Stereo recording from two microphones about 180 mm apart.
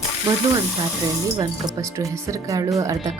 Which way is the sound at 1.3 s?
20° right (ahead or behind).